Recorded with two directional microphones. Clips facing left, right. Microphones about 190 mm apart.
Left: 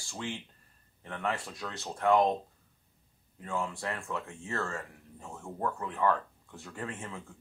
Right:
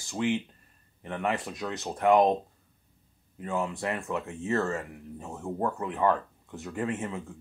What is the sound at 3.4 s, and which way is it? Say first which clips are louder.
Speech: right 4 dB; 20° right (ahead or behind).